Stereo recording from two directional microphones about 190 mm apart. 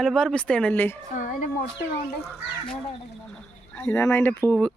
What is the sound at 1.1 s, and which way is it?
Speech, 40° left (ahead or behind).